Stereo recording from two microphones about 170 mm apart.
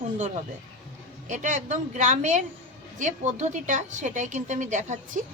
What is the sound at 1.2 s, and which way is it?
Speech, 45° right (ahead or behind).